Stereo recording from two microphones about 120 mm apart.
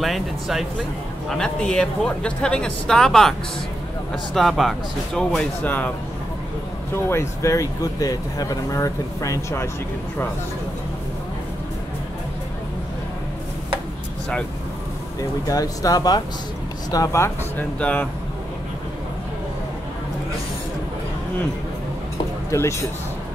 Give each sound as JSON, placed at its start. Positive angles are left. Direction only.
{"t": 0.0, "sound": "speech", "side_deg": 0}
{"t": 5.6, "sound": "speech", "side_deg": 15}
{"t": 7.1, "sound": "speech", "side_deg": 25}
{"t": 15.4, "sound": "speech", "side_deg": 30}
{"t": 17.7, "sound": "speech", "side_deg": 10}
{"t": 22.5, "sound": "speech", "side_deg": 25}